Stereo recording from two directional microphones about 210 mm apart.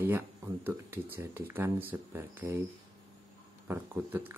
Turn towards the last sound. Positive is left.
turn(degrees=-10)  # may be behind; listen again after turning